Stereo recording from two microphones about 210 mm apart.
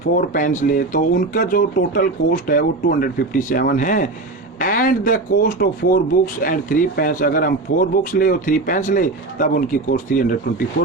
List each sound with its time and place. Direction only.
0.2 s speech: 40° left (ahead or behind)